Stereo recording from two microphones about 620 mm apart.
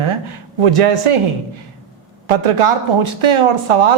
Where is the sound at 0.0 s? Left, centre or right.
Right.